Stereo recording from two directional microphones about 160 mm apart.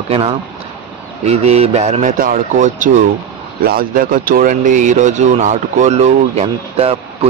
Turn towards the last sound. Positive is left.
turn(degrees=-40)  # may be behind; listen again after turning